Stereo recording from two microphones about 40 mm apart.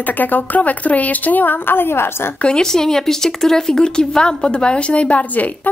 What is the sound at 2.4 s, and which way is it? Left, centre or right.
Speech, centre.